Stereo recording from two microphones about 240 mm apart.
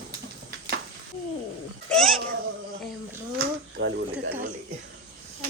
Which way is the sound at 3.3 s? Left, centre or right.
Right.